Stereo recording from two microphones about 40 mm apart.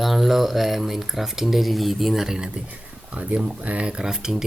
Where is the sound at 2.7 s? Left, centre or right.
Right.